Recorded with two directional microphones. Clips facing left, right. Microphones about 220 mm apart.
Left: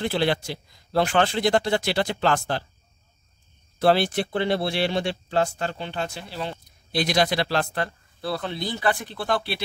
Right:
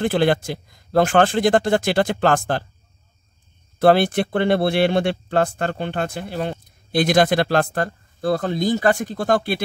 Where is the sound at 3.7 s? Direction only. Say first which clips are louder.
Right 5 dB; 55° right (ahead or behind).